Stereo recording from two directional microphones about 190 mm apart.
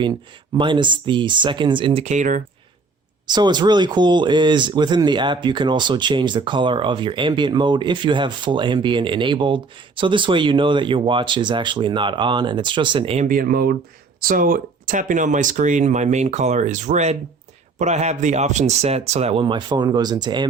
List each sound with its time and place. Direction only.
0.0 s speech: 25° right (ahead or behind); by 2.4 s 40° right (ahead or behind)
3.2 s speech: 20° right (ahead or behind)
13.2 s speech: 50° right (ahead or behind); by 20.5 s 20° right (ahead or behind)